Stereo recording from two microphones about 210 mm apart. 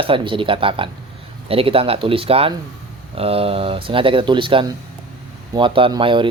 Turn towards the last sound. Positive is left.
turn(degrees=-25)  # may be behind; listen again after turning